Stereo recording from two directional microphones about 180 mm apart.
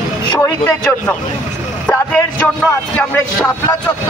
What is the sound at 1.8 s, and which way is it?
A man's voice, 5° left (ahead or behind).